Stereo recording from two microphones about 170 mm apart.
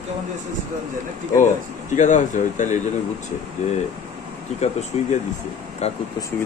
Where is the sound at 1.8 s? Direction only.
45° left (ahead or behind).